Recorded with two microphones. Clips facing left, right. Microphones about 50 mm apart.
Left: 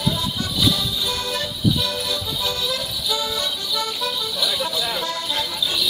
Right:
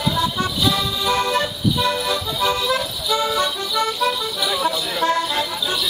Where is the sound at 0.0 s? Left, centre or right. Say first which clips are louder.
Right 4 dB; right.